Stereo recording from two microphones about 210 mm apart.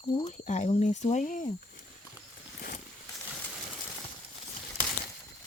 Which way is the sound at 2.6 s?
40° left (ahead or behind).